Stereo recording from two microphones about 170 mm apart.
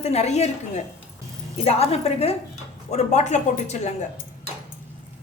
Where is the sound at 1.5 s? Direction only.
35° left (ahead or behind).